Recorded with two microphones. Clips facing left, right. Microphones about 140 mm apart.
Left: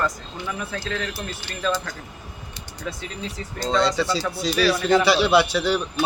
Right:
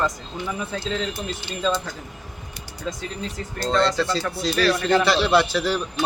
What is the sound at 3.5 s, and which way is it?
Speech, centre (ahead or behind).